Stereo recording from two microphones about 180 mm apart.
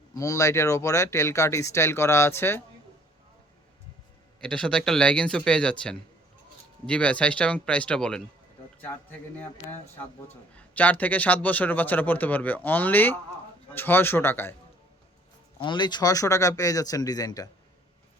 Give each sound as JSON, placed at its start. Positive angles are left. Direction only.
{"t": 0.1, "sound": "a man's voice", "side_deg": 20}
{"t": 4.4, "sound": "speech", "side_deg": 5}
{"t": 10.5, "sound": "a man's voice", "side_deg": 10}
{"t": 15.5, "sound": "speech", "side_deg": 25}